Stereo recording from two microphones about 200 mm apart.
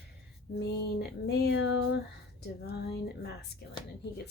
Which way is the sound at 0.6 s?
55° left (ahead or behind).